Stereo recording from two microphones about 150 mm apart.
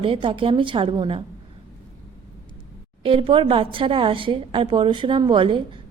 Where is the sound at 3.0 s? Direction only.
35° right (ahead or behind).